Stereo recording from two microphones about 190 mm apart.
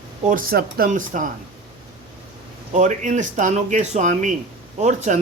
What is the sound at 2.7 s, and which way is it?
Speech, 40° right (ahead or behind).